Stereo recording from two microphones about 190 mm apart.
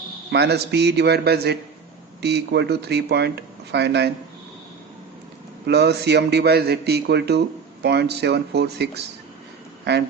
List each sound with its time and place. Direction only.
0.3 s a man's voice: 60° right (ahead or behind)
5.6 s a man's voice: 60° right (ahead or behind)